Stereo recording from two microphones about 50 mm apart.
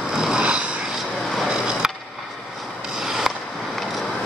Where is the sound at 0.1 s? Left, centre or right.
Centre.